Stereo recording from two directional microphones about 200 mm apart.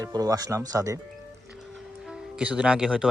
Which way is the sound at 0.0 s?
20° right (ahead or behind).